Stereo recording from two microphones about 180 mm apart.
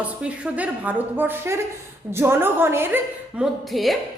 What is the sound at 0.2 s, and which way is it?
A woman's voice, 5° right (ahead or behind).